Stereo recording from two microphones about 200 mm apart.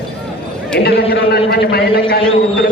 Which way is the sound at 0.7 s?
55° left (ahead or behind).